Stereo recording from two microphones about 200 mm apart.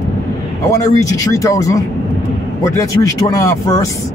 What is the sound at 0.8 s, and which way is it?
Speech, 15° left (ahead or behind).